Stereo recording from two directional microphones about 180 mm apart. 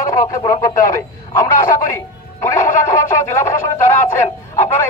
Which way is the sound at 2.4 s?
15° left (ahead or behind).